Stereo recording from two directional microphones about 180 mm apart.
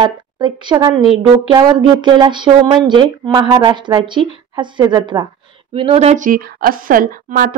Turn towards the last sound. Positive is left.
turn(degrees=-50)  # may be behind; listen again after turning